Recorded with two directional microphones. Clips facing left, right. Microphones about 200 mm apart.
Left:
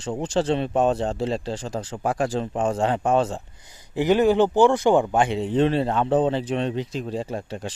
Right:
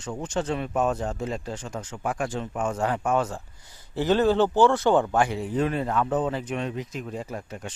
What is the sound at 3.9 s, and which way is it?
A man's voice, 15° left (ahead or behind).